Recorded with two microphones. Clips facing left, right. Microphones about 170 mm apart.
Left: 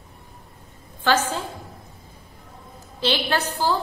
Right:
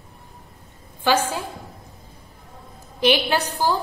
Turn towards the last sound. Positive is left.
turn(degrees=-10)  # may be behind; listen again after turning